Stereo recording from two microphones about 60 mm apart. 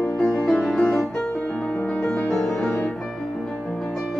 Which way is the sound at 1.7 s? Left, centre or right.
Centre.